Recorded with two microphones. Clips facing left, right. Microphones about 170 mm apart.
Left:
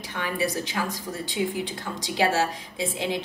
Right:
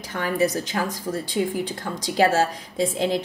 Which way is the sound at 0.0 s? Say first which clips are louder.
Right 5 dB; 45° right (ahead or behind).